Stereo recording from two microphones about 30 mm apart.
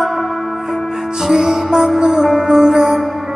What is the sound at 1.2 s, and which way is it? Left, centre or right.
Music, centre.